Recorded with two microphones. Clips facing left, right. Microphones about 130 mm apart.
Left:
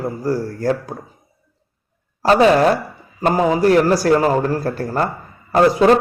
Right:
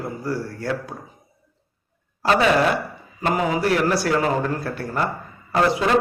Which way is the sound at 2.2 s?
35° left (ahead or behind).